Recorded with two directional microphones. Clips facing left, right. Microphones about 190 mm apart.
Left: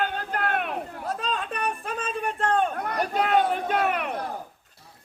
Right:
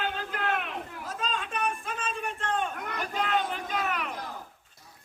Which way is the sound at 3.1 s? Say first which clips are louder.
Left 7 dB; 60° left (ahead or behind).